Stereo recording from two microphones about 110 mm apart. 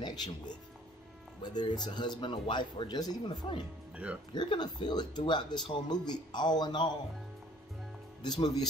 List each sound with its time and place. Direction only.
0.0 s speech: 40° left (ahead or behind)
1.4 s speech: 40° left (ahead or behind)
3.9 s speech: 10° right (ahead or behind)
4.3 s speech: 40° left (ahead or behind)
8.2 s speech: 40° left (ahead or behind)